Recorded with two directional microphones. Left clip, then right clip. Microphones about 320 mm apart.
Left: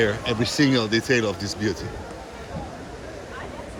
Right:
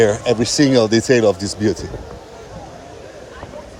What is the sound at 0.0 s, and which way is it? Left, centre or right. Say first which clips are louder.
Speech: right 8 dB; right.